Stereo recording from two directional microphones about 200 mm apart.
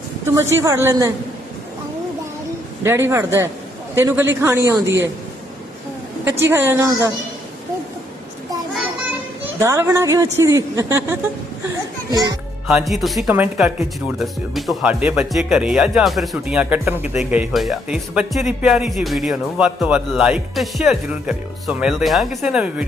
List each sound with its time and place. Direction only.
0.3 s speech: 15° right (ahead or behind)
2.8 s speech: 10° right (ahead or behind)
6.4 s speech: 10° right (ahead or behind)
9.4 s speech: 15° right (ahead or behind)
12.6 s speech: centre (ahead or behind)